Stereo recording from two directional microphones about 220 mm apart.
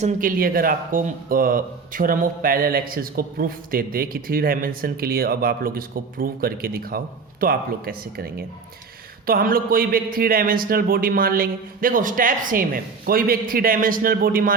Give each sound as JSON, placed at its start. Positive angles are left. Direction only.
{"t": 0.0, "sound": "speech", "side_deg": -40}